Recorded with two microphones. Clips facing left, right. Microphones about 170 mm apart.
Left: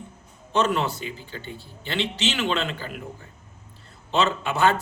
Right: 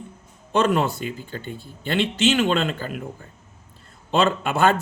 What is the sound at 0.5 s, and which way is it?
Speech, 50° right (ahead or behind).